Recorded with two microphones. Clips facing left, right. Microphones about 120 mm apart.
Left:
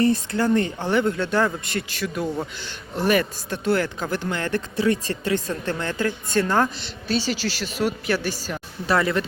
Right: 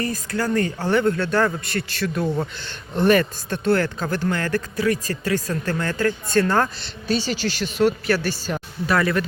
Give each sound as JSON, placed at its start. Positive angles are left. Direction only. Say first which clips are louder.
{"t": 0.0, "sound": "speech", "louder": "left 4 dB", "side_deg": 25}
{"t": 2.2, "sound": "speech", "louder": "right 3 dB", "side_deg": -5}
{"t": 2.6, "sound": "speech", "louder": "right 4 dB", "side_deg": 10}
{"t": 8.0, "sound": "speech", "louder": "right 2 dB", "side_deg": 15}